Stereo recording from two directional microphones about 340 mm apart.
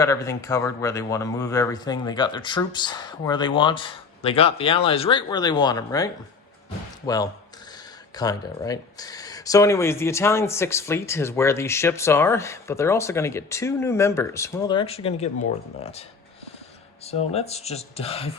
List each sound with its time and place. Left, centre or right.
0.0 s speech: centre
17.1 s speech: centre